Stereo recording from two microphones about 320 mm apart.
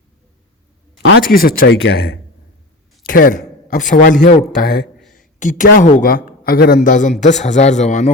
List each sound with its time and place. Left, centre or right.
1.0 s speech: left
3.1 s a man's voice: left